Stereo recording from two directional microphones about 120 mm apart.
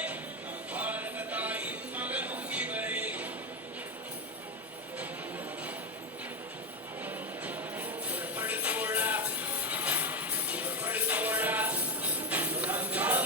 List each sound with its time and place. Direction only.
0.7 s jingle bell: 15° right (ahead or behind)
7.0 s music: 15° right (ahead or behind)